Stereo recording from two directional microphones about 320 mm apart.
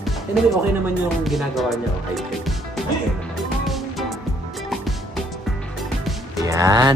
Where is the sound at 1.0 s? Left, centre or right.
Centre.